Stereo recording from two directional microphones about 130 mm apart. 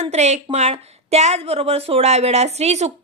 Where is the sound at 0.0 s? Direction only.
60° right (ahead or behind).